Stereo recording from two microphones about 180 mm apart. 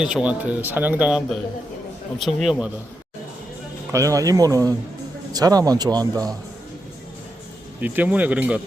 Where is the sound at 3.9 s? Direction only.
15° right (ahead or behind).